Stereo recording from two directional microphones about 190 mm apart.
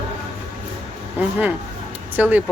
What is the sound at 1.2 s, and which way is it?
Speech, 10° right (ahead or behind).